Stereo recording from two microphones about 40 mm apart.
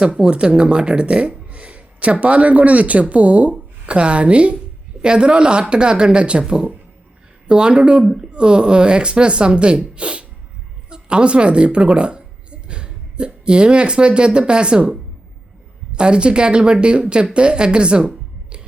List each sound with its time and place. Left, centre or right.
0.0 s speech: right
7.4 s a woman's voice: right